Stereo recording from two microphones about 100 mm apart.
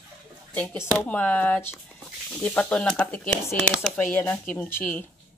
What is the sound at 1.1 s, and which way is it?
Speech, 15° left (ahead or behind).